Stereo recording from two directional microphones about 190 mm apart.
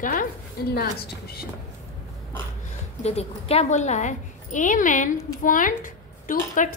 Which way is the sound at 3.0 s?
35° left (ahead or behind).